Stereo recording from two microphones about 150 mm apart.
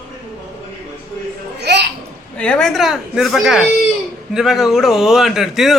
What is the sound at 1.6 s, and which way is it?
Babbling, 90° right.